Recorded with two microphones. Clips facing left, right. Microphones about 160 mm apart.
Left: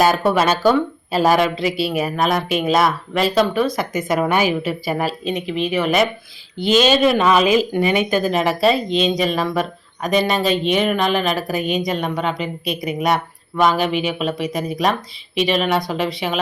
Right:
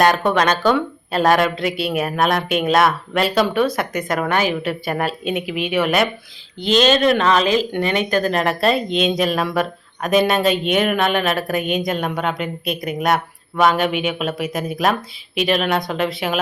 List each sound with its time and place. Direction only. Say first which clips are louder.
0.0 s speech: even; 5° left (ahead or behind)